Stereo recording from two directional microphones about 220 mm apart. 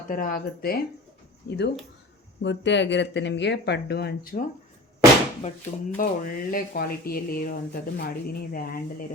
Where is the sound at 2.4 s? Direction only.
55° left (ahead or behind); by 4.5 s 40° left (ahead or behind).